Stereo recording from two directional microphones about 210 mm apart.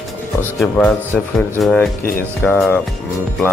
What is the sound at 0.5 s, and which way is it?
Speech, 5° left (ahead or behind).